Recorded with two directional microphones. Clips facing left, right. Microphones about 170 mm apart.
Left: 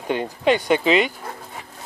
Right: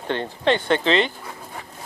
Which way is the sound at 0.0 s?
10° left (ahead or behind).